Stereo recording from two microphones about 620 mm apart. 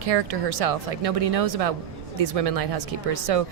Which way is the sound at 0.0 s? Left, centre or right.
Right.